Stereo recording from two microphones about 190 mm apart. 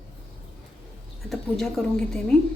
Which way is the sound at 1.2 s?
Centre (ahead or behind).